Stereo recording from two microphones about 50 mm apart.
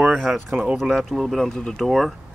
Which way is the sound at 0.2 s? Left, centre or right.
Centre.